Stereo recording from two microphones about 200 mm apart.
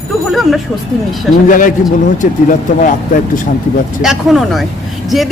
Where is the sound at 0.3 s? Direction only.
Centre (ahead or behind).